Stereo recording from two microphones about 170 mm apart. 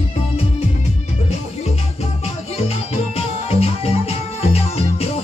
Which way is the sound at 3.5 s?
35° left (ahead or behind).